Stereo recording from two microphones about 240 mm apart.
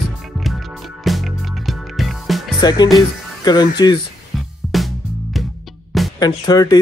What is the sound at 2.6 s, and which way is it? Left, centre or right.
Speech, centre.